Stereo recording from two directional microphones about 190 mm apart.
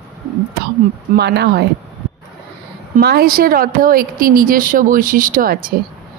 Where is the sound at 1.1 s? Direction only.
60° right (ahead or behind).